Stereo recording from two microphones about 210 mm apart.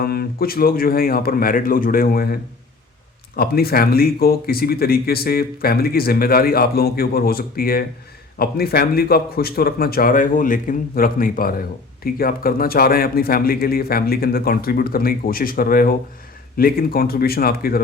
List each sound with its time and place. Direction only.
0.0 s speech: 45° left (ahead or behind)